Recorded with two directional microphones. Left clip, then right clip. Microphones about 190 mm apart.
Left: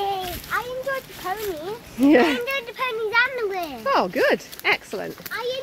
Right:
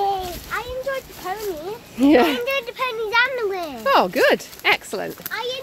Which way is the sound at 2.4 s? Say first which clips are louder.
Right 3 dB; 45° right (ahead or behind).